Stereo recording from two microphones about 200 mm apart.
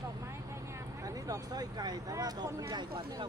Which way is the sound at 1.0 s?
15° right (ahead or behind).